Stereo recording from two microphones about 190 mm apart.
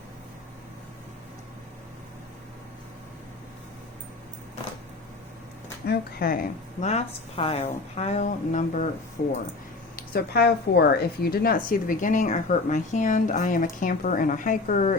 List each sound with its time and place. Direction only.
5.8 s speech: 55° left (ahead or behind)
6.8 s a woman's voice: 35° left (ahead or behind)
9.2 s speech: 55° left (ahead or behind)